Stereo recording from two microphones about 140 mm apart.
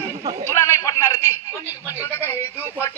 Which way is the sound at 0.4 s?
20° left (ahead or behind).